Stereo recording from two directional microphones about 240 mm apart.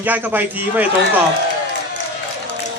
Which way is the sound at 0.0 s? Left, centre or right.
Centre.